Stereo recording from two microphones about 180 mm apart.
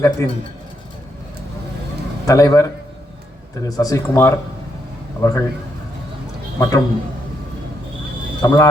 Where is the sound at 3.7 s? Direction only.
20° left (ahead or behind).